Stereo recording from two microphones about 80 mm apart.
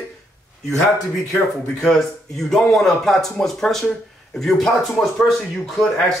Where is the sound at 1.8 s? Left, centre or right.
Centre.